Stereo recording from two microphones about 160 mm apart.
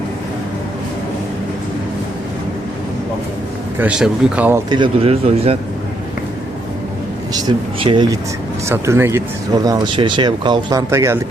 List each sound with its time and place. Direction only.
3.8 s speech: 5° right (ahead or behind)
4.7 s speech: 35° right (ahead or behind)
7.3 s speech: 25° right (ahead or behind)
8.7 s speech: 15° right (ahead or behind)
9.6 s speech: 25° right (ahead or behind)